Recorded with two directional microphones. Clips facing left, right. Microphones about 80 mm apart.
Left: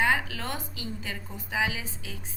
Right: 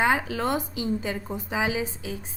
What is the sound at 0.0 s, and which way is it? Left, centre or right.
A woman's voice, right.